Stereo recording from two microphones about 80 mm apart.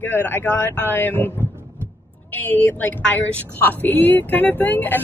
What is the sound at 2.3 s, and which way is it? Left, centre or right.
Speech, left.